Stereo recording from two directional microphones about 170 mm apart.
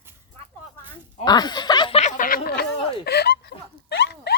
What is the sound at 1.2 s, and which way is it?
Speech, 25° left (ahead or behind).